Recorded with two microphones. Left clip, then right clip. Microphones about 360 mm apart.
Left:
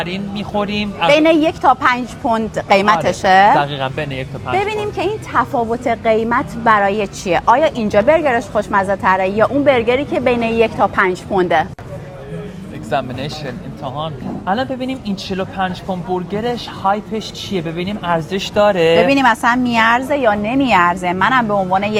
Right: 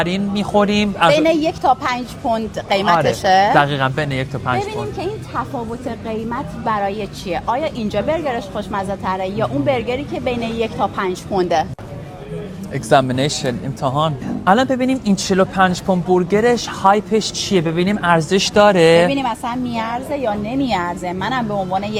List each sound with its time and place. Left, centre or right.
0.0 s speech: right
1.1 s a woman's voice: left
3.5 s speech: right
4.6 s a woman's voice: left
12.9 s speech: right
19.0 s a woman's voice: left